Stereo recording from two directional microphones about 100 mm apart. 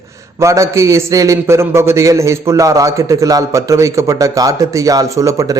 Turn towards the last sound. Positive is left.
turn(degrees=-30)  # may be behind; listen again after turning